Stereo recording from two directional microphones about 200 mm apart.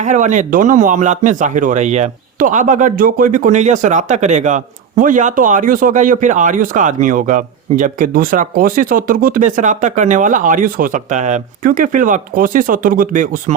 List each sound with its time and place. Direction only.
0.0 s speech: 40° right (ahead or behind)